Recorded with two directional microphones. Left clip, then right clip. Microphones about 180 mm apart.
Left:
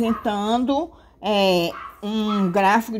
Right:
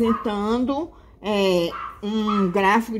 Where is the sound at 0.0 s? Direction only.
40° left (ahead or behind).